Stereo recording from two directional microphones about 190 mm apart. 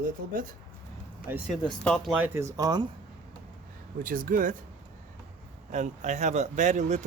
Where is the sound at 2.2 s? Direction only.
15° right (ahead or behind).